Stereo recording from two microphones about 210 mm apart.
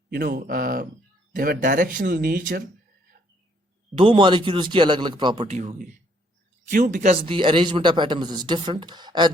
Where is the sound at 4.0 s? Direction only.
25° right (ahead or behind).